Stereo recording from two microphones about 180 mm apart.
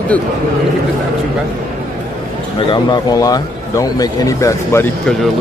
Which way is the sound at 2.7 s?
25° left (ahead or behind).